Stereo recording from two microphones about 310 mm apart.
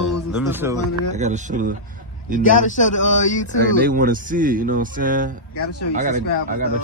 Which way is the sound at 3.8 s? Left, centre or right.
Right.